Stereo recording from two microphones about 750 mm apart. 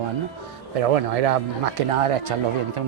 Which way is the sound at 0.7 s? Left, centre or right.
Right.